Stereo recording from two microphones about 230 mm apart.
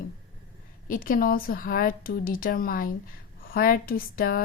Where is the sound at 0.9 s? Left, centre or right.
Left.